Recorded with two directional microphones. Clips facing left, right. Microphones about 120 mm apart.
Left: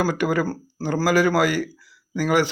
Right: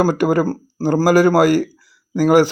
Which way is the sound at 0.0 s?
40° right (ahead or behind).